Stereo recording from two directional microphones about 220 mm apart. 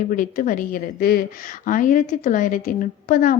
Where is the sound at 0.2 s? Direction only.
35° left (ahead or behind).